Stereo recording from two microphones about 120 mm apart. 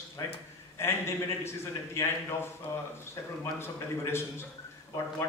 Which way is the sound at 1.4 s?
20° left (ahead or behind).